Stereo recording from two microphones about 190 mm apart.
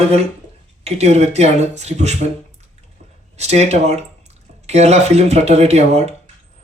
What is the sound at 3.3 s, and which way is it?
Speech, 35° right (ahead or behind).